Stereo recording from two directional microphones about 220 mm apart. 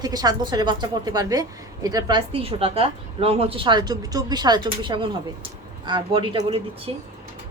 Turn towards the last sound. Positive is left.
turn(degrees=-25)  # may be behind; listen again after turning